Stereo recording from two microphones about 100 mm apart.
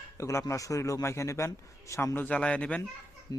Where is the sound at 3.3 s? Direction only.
40° left (ahead or behind).